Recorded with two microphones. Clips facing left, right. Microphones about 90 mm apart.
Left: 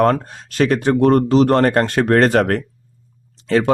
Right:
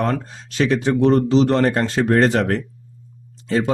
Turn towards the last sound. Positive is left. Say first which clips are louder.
# left 4 dB
turn(degrees=70)  # may be behind; listen again after turning